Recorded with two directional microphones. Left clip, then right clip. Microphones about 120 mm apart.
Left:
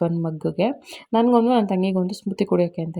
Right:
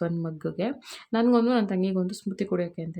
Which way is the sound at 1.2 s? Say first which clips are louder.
Left 5 dB; 25° left (ahead or behind).